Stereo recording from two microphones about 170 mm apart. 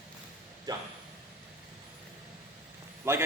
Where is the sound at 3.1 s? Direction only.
15° right (ahead or behind).